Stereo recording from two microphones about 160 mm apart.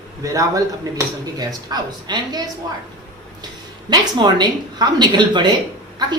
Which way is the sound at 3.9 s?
25° right (ahead or behind).